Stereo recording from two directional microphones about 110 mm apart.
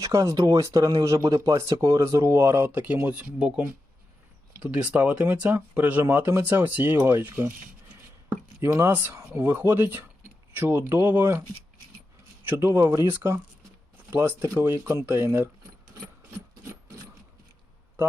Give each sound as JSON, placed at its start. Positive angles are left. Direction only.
{"t": 0.0, "sound": "speech", "side_deg": -30}
{"t": 8.6, "sound": "speech", "side_deg": -25}
{"t": 12.5, "sound": "speech", "side_deg": -25}